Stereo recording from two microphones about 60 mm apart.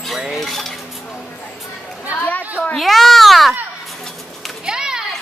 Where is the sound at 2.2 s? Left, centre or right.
Left.